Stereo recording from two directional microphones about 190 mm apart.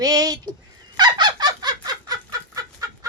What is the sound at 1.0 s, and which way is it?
Fowl, 20° right (ahead or behind).